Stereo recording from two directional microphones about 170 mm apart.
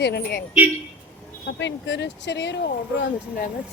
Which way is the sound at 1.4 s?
90° left.